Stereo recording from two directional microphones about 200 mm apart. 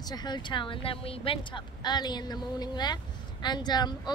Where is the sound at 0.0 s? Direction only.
20° left (ahead or behind).